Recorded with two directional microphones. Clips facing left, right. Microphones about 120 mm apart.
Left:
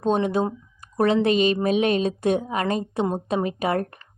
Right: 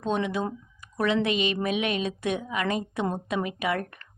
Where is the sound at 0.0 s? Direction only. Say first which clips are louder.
Left 6 dB; 40° left (ahead or behind).